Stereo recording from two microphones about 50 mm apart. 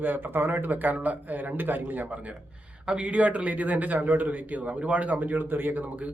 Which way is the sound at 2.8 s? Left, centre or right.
Right.